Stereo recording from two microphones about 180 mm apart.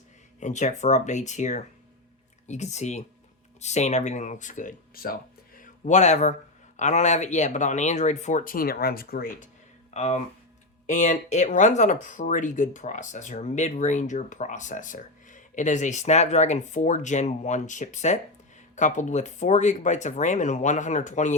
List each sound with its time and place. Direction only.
0.3 s speech: 40° left (ahead or behind)
5.5 s a sound: 45° left (ahead or behind)
6.7 s speech: 40° left (ahead or behind)
9.9 s speech: 40° left (ahead or behind)